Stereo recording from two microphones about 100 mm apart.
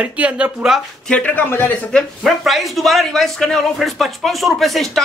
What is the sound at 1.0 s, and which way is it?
Speech, 15° left (ahead or behind).